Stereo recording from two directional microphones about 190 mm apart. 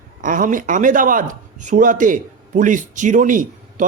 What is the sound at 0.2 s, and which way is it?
Speech, 45° right (ahead or behind).